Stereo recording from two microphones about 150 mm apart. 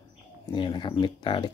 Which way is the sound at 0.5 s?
30° left (ahead or behind).